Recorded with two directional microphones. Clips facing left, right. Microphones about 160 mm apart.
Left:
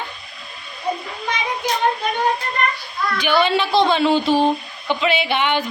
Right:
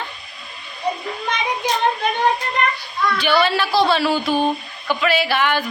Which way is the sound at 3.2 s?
15° left (ahead or behind).